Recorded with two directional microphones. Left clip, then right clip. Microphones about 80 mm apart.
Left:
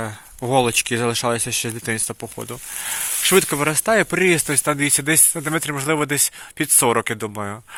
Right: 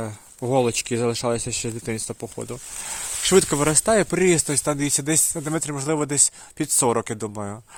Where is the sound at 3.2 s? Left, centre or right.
Right.